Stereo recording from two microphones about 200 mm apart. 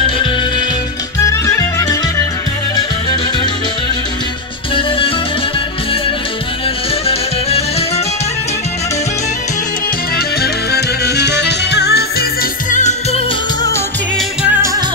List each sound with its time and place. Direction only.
1.2 s music: 15° left (ahead or behind)
4.7 s music: 25° left (ahead or behind)
10.1 s music: 55° left (ahead or behind)
12.7 s music: 35° left (ahead or behind)